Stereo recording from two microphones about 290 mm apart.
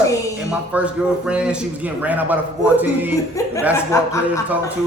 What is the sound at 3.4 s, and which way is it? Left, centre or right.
Speech, centre.